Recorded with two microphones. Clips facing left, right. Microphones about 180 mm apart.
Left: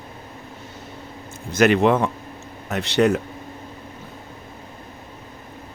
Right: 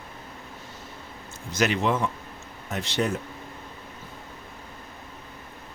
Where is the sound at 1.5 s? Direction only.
55° left (ahead or behind).